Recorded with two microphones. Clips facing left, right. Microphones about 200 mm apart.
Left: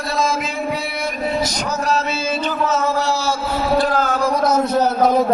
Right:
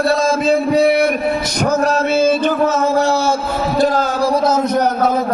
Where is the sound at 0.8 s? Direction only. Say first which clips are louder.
Right 10 dB; 60° right (ahead or behind); by 5.1 s 15° right (ahead or behind).